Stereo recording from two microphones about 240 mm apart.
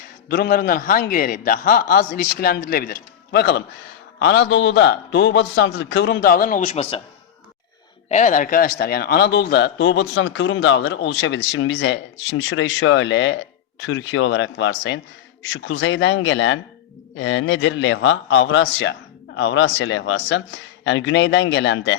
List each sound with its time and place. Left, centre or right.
0.3 s a man's voice: left
8.1 s a man's voice: left